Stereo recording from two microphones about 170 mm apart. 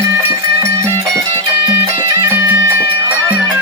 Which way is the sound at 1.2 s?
25° right (ahead or behind).